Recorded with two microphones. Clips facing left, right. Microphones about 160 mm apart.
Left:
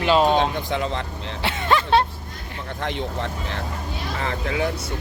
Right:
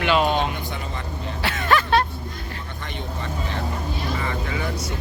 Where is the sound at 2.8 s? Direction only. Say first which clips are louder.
Left 7 dB; 85° left.